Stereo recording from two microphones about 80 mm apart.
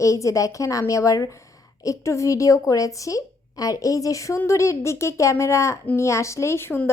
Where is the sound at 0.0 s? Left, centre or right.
Left.